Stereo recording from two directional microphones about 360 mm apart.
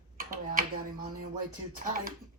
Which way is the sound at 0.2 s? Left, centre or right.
Right.